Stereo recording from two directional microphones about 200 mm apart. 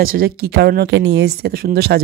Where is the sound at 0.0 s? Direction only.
45° right (ahead or behind).